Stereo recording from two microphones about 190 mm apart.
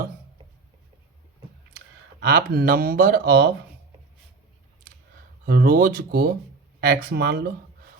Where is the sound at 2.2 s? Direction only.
55° right (ahead or behind).